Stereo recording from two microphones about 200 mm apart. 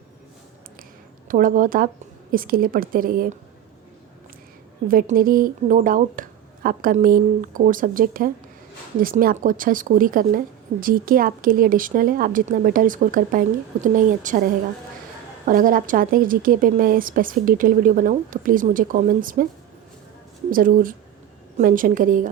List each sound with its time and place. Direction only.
1.3 s a woman's voice: 45° right (ahead or behind)
4.9 s a woman's voice: 45° right (ahead or behind)
20.5 s a woman's voice: 45° right (ahead or behind)